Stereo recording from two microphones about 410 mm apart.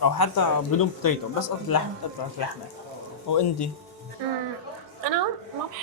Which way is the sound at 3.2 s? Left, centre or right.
Left.